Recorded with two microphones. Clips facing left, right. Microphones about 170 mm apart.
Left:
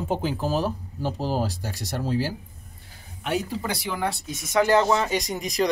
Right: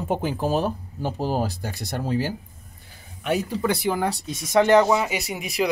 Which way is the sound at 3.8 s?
45° right (ahead or behind).